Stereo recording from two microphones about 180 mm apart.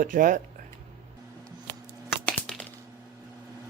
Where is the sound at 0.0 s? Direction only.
50° right (ahead or behind).